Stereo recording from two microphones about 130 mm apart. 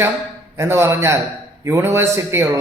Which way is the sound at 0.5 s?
20° right (ahead or behind).